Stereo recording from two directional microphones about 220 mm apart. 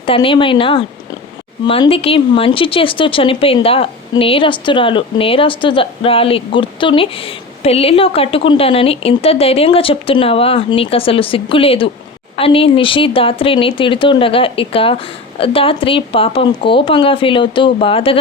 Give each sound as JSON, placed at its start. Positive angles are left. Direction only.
{"t": 0.0, "sound": "speech", "side_deg": 25}